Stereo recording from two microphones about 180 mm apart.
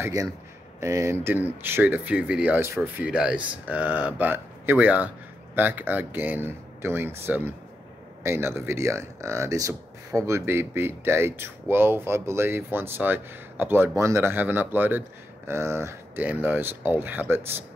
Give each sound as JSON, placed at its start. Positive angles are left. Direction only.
{"t": 0.0, "sound": "speech", "side_deg": -20}